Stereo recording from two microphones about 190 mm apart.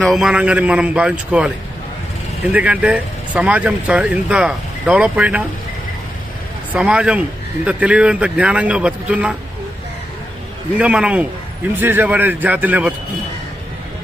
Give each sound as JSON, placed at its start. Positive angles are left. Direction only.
{"t": 0.0, "sound": "a man's voice", "side_deg": 0}
{"t": 6.7, "sound": "a man's voice", "side_deg": -5}
{"t": 10.8, "sound": "speech", "side_deg": -5}